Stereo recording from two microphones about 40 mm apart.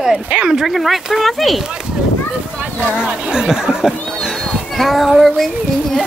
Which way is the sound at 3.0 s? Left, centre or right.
Right.